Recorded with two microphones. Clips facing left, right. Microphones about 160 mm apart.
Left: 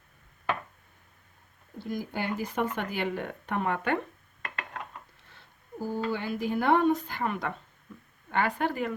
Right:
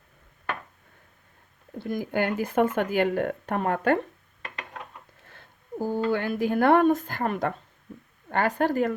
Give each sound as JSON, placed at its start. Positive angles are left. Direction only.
{"t": 1.8, "sound": "speech", "side_deg": -55}
{"t": 5.3, "sound": "speech", "side_deg": -50}